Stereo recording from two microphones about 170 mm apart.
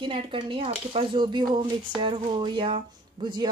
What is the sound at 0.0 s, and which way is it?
Speech, 30° right (ahead or behind).